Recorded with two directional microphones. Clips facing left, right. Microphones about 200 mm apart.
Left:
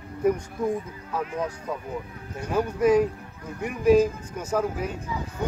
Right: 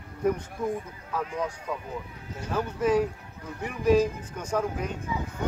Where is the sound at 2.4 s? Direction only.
10° left (ahead or behind).